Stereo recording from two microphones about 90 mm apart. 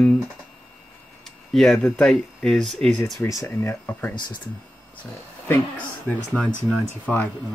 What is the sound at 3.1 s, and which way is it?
Speech, 35° left (ahead or behind).